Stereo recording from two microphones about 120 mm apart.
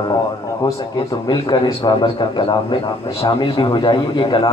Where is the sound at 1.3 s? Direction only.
35° left (ahead or behind).